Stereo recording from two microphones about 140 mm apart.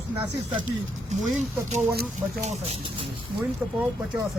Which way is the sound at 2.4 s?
50° right (ahead or behind).